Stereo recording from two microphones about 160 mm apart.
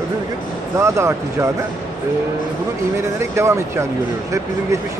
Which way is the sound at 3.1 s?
15° right (ahead or behind).